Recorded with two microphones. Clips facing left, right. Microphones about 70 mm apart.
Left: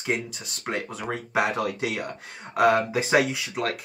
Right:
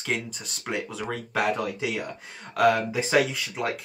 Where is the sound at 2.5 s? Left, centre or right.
Centre.